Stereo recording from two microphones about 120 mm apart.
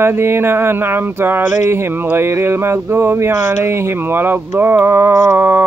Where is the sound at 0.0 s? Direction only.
20° right (ahead or behind).